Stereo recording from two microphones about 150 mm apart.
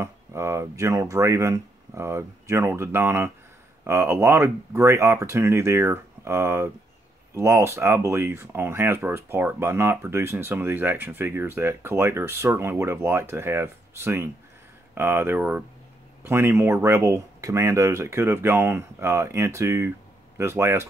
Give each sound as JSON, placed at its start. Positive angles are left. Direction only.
{"t": 0.0, "sound": "speech", "side_deg": -20}